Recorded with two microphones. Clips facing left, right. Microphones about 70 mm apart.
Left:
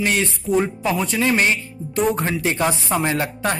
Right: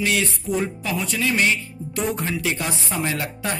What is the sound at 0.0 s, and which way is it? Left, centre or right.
Speech, left.